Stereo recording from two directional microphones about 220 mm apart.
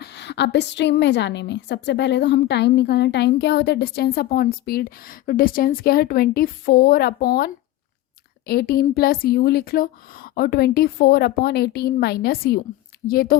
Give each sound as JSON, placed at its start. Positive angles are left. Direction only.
{"t": 0.0, "sound": "a woman's voice", "side_deg": 50}